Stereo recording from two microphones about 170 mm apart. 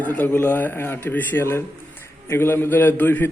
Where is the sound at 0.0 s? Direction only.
10° left (ahead or behind).